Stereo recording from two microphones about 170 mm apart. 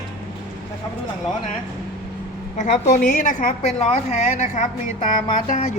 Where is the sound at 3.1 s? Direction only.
50° left (ahead or behind).